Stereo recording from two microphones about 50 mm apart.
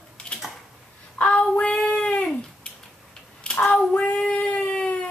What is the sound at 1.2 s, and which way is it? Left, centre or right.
Child singing, left.